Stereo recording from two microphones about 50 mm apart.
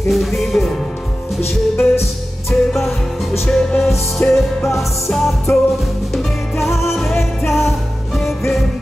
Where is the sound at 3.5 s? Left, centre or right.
Centre.